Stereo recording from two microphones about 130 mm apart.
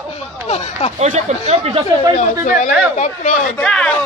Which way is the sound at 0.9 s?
55° right (ahead or behind).